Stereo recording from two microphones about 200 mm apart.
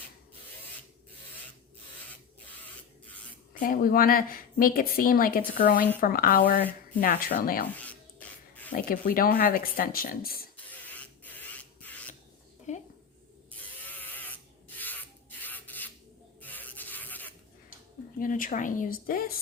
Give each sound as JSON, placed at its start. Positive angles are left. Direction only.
{"t": 3.5, "sound": "a woman's voice", "side_deg": 45}
{"t": 8.7, "sound": "a woman's voice", "side_deg": 45}
{"t": 10.7, "sound": "printer", "side_deg": 10}
{"t": 12.7, "sound": "a sound", "side_deg": 35}
{"t": 13.8, "sound": "a sound", "side_deg": 10}
{"t": 14.8, "sound": "rub", "side_deg": 10}
{"t": 15.4, "sound": "filing", "side_deg": 10}
{"t": 16.4, "sound": "rub", "side_deg": 10}
{"t": 18.2, "sound": "a woman's voice", "side_deg": 40}